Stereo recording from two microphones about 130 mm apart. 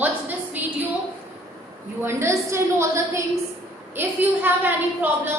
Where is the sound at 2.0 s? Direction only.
20° right (ahead or behind).